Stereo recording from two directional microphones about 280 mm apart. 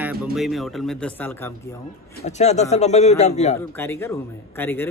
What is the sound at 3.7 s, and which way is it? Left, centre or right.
Speech, centre.